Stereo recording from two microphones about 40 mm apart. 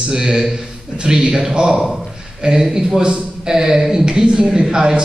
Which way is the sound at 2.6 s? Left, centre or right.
Centre.